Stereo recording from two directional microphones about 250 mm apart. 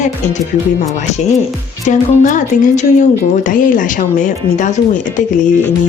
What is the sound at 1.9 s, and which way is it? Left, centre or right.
Speech, left.